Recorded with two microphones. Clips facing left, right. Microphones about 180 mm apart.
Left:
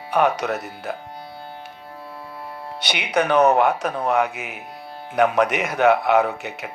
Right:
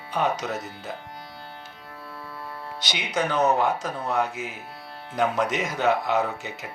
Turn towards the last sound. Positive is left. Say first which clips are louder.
# left 4 dB
turn(degrees=65)  # may be behind; listen again after turning